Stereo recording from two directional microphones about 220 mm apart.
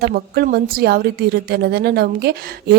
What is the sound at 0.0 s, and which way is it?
A woman's voice, 45° right (ahead or behind).